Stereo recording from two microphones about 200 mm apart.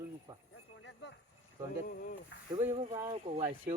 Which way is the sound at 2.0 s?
45° left (ahead or behind).